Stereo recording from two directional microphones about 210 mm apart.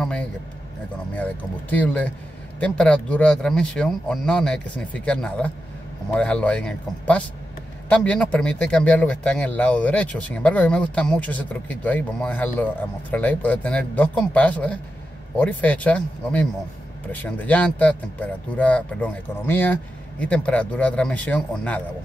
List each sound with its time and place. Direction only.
0.0 s speech: 5° left (ahead or behind)